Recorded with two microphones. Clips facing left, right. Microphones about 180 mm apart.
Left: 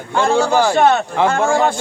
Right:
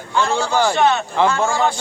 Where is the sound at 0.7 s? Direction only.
50° left (ahead or behind).